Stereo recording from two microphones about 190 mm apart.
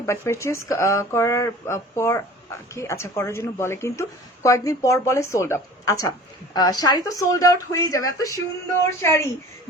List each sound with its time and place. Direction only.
0.0 s speech: 15° left (ahead or behind)